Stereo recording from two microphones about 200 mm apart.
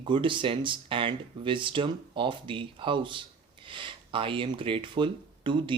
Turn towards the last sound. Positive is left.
turn(degrees=-25)  # may be behind; listen again after turning